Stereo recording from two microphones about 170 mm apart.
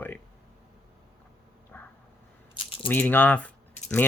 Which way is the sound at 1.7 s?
10° left (ahead or behind).